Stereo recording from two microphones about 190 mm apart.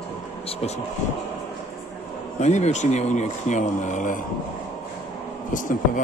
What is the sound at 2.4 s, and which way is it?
A man's voice, 40° left (ahead or behind).